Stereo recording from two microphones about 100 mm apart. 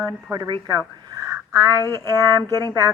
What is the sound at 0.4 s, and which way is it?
Speech, 45° right (ahead or behind).